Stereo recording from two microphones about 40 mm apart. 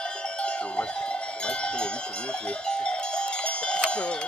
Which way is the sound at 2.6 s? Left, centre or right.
Left.